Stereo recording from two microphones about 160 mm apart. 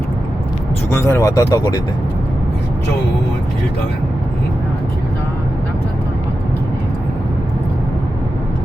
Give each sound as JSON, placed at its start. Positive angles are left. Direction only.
{"t": 0.9, "sound": "speech", "side_deg": 15}